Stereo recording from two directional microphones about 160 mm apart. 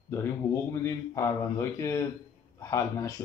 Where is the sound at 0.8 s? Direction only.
20° left (ahead or behind).